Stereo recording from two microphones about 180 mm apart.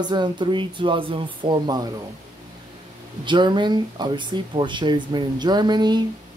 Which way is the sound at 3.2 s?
25° right (ahead or behind).